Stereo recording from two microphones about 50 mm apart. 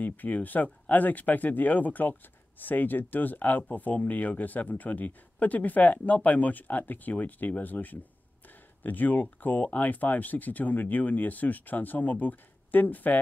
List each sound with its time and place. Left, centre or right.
0.0 s speech: left